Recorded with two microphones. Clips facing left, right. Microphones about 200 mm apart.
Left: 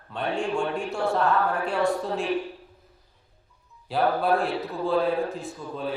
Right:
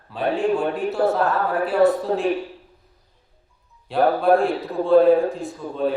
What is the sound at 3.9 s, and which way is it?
A man's voice, centre (ahead or behind).